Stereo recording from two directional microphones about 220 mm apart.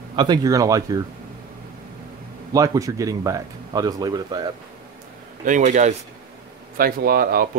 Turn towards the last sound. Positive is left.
turn(degrees=-40)  # may be behind; listen again after turning